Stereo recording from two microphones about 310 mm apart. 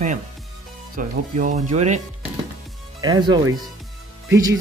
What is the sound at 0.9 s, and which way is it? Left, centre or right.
Speech, right.